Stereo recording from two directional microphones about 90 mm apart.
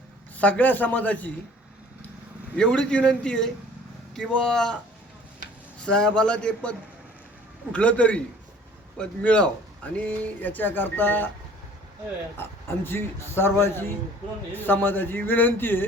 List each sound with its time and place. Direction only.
0.3 s speech: 15° left (ahead or behind)
2.6 s a man's voice: 10° left (ahead or behind)
5.8 s a man's voice: 10° left (ahead or behind)
12.4 s speech: 25° left (ahead or behind)